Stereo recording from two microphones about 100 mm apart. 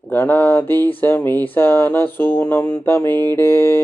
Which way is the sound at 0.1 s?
20° left (ahead or behind).